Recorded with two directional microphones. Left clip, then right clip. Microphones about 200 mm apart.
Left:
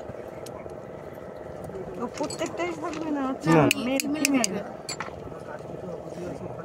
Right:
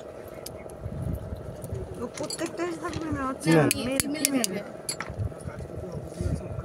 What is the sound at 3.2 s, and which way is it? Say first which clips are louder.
Speech: left 1 dB; 25° right (ahead or behind).